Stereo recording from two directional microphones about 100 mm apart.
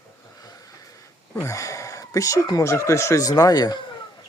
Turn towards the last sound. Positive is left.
turn(degrees=40)  # may be behind; listen again after turning